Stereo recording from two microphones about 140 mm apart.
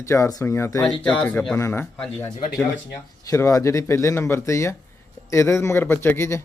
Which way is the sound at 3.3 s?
20° left (ahead or behind).